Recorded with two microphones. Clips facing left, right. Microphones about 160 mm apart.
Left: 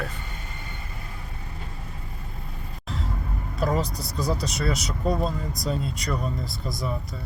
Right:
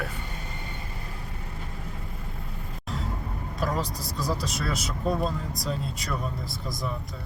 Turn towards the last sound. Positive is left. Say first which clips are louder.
# left 2 dB
turn(degrees=0)  # may be behind; listen again after turning